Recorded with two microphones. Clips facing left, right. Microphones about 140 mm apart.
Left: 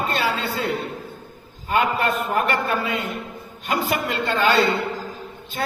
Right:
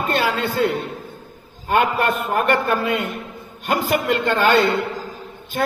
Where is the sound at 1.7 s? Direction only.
55° right (ahead or behind).